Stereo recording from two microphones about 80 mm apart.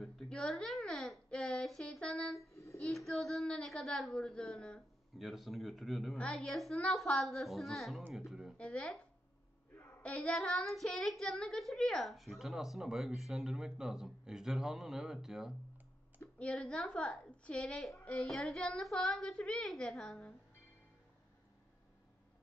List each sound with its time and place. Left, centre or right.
0.0 s babbling: centre
2.5 s child singing: left
3.1 s a woman's voice: centre
8.5 s a woman's voice: centre
9.8 s a sound: centre
10.3 s a child's voice: centre
16.3 s a woman's voice: centre